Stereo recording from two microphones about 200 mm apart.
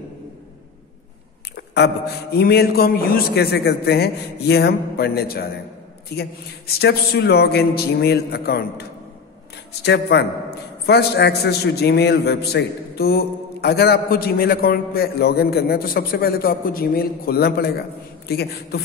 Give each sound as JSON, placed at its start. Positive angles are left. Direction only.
{"t": 1.7, "sound": "a man's voice", "side_deg": 55}
{"t": 9.8, "sound": "a man's voice", "side_deg": 55}